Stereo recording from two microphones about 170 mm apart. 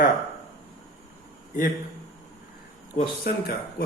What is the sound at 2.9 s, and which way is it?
Speech, 60° left (ahead or behind).